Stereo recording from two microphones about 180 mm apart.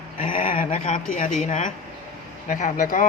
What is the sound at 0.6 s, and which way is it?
Speech, 40° left (ahead or behind).